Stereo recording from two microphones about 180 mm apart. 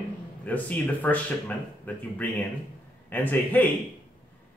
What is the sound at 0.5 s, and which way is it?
Speech, 10° left (ahead or behind).